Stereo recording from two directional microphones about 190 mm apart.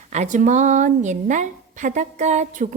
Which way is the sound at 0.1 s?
40° right (ahead or behind).